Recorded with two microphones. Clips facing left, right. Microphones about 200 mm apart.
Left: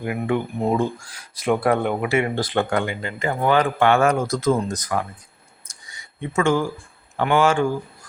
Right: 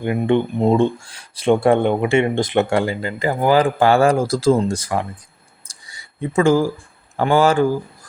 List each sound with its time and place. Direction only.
0.0 s speech: 30° right (ahead or behind)
5.6 s a sound: 35° right (ahead or behind)
7.2 s speech: 35° right (ahead or behind)